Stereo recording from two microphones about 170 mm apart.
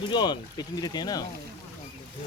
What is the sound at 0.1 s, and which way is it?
Speech, 25° left (ahead or behind).